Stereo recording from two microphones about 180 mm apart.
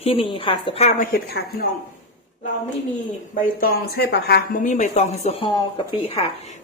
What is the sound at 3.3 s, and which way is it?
Speech, 50° left (ahead or behind).